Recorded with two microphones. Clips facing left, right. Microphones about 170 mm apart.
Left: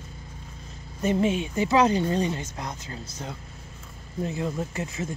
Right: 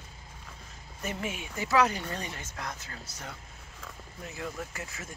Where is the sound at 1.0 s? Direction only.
25° left (ahead or behind).